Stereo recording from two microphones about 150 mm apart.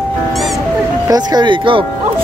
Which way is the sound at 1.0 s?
25° right (ahead or behind).